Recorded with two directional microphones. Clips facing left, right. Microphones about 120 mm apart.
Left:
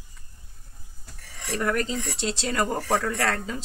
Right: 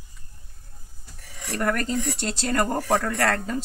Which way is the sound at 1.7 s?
50° right (ahead or behind).